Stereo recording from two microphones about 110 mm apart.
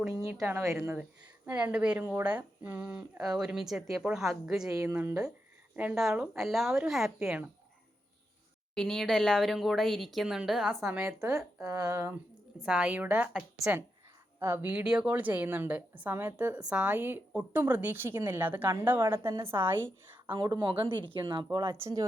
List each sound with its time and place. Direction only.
0.1 s speech: 25° right (ahead or behind)
0.9 s a woman's voice: 10° right (ahead or behind)
5.7 s speech: 15° right (ahead or behind)
6.0 s speech: 5° right (ahead or behind)
7.2 s speech: 20° right (ahead or behind)
8.7 s speech: 5° left (ahead or behind)
11.0 s speech: 25° right (ahead or behind)
12.6 s a woman's voice: 10° right (ahead or behind)
14.7 s a woman's voice: 10° right (ahead or behind)
20.3 s speech: 40° right (ahead or behind)